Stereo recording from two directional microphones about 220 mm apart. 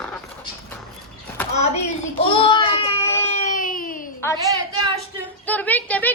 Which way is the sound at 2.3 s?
20° left (ahead or behind).